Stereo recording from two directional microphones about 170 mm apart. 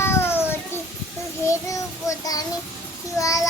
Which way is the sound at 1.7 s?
20° left (ahead or behind).